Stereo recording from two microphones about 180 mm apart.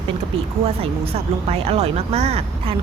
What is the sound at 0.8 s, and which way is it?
Speech, 35° right (ahead or behind).